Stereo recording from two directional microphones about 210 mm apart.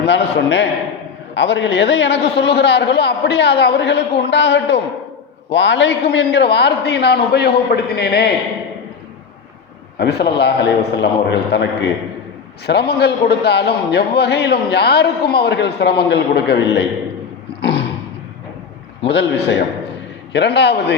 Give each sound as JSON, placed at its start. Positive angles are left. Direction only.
{"t": 0.0, "sound": "a man's voice", "side_deg": 55}
{"t": 10.0, "sound": "a man's voice", "side_deg": 50}
{"t": 17.6, "sound": "roaring cats", "side_deg": 55}
{"t": 19.0, "sound": "a man's voice", "side_deg": 55}